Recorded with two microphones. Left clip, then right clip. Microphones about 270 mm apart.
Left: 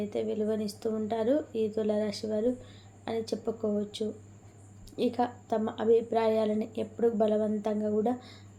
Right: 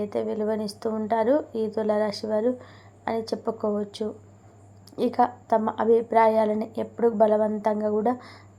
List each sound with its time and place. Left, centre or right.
0.0 s a woman's voice: centre